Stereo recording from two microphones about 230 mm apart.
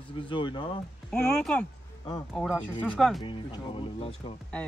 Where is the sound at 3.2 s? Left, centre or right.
Left.